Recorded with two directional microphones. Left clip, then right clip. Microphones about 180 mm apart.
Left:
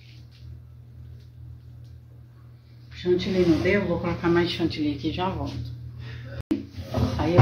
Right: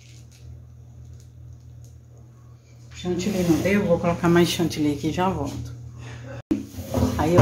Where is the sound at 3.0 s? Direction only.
50° right (ahead or behind).